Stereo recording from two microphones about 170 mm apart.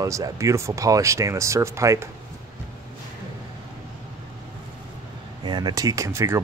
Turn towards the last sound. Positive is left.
turn(degrees=-15)  # may be behind; listen again after turning